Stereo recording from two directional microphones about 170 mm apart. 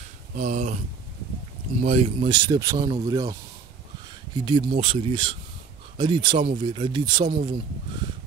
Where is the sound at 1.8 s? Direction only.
35° right (ahead or behind).